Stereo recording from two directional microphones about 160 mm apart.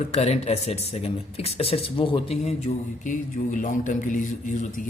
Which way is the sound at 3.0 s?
55° left (ahead or behind).